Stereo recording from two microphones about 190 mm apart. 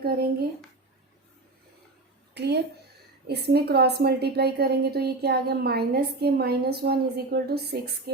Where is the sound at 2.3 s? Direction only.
60° right (ahead or behind).